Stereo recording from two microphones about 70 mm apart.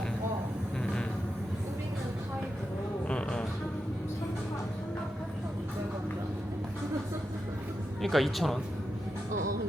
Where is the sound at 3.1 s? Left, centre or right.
Centre.